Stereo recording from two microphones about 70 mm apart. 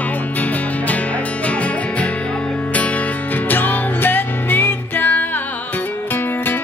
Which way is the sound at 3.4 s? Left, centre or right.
Left.